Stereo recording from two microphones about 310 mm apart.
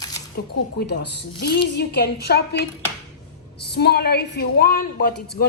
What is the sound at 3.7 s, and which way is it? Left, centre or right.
A woman's voice, left.